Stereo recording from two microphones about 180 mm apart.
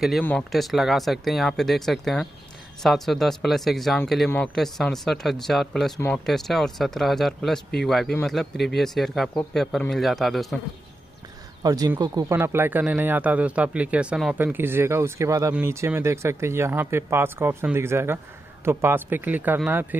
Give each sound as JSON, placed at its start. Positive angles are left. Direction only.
{"t": 0.2, "sound": "speech", "side_deg": 5}
{"t": 11.6, "sound": "speech", "side_deg": -20}